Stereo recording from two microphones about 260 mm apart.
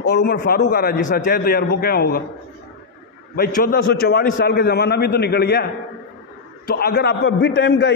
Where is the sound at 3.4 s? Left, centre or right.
Left.